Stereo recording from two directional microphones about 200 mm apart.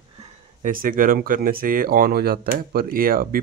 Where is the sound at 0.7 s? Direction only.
45° right (ahead or behind).